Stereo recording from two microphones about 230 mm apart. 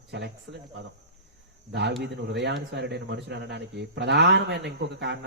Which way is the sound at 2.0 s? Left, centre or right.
Right.